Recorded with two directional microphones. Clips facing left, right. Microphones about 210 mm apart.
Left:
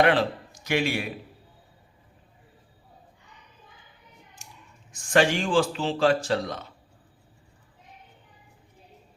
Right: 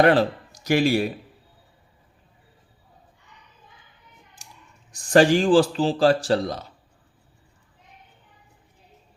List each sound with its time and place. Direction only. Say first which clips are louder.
0.0 s speech: right 4 dB; 40° right (ahead or behind)
4.9 s speech: right 6 dB; 35° right (ahead or behind)